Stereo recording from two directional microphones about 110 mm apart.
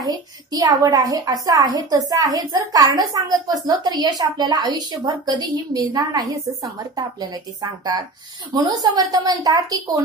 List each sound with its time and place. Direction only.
0.0 s a woman's voice: 35° right (ahead or behind)